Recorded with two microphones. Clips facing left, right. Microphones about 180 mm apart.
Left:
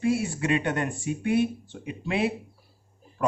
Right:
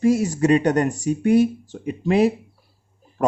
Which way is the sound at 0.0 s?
40° right (ahead or behind).